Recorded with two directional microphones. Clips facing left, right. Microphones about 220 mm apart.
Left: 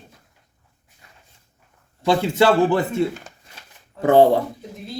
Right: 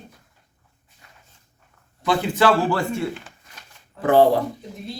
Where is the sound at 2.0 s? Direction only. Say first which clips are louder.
Left 2 dB; 25° left (ahead or behind).